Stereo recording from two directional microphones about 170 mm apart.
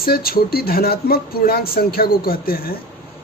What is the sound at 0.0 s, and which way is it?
Speech, 65° left (ahead or behind).